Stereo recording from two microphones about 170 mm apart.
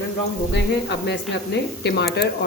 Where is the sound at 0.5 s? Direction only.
85° left.